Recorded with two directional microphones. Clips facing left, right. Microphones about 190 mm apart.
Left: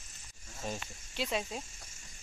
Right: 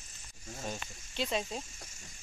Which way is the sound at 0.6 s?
5° left (ahead or behind).